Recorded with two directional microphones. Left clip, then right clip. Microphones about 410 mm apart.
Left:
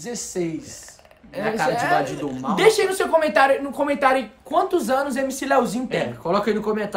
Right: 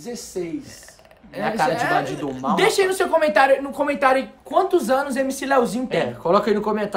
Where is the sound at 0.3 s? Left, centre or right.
Left.